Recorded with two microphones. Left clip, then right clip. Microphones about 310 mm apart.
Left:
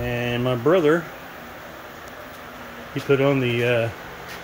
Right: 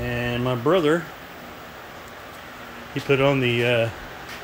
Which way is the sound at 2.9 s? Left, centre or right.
Centre.